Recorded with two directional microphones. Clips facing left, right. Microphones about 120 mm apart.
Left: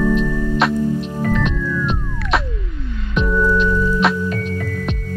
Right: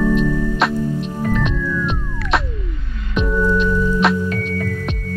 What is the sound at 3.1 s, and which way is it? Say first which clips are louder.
Music: left 1 dB; 15° right (ahead or behind).